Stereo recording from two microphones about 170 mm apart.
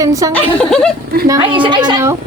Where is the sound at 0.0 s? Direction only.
20° right (ahead or behind).